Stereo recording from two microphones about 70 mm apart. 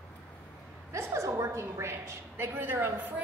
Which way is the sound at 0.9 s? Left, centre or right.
Right.